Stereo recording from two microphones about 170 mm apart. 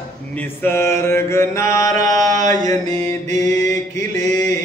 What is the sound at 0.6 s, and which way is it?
Mantra, 15° left (ahead or behind).